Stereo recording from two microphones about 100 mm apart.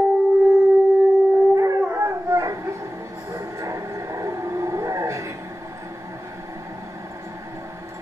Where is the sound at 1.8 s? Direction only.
20° right (ahead or behind).